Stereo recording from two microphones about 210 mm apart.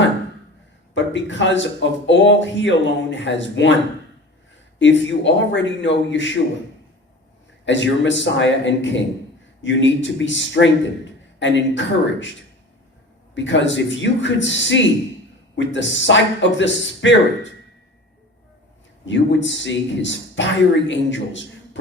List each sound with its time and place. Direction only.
0.9 s speech: 60° left (ahead or behind)
4.8 s speech: 60° left (ahead or behind)
7.6 s speech: 60° left (ahead or behind)
13.3 s speech: 60° left (ahead or behind)
19.0 s speech: 60° left (ahead or behind)